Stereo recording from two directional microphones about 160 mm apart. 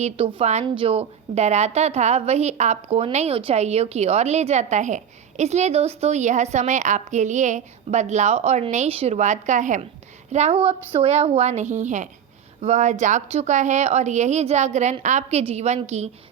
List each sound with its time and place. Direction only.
0.0 s a woman's voice: 35° right (ahead or behind); by 9.8 s 50° right (ahead or behind)
10.3 s a woman's voice: 40° right (ahead or behind)